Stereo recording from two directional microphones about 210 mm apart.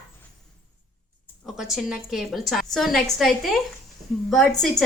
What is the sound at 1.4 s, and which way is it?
A woman's voice, centre (ahead or behind).